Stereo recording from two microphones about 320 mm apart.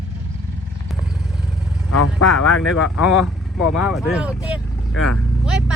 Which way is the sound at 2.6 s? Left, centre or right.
Centre.